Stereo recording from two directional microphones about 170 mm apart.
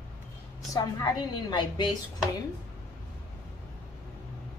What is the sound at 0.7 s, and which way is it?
A woman's voice, 25° left (ahead or behind).